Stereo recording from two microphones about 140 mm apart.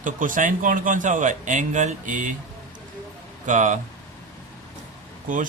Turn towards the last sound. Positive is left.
turn(degrees=-70)  # may be behind; listen again after turning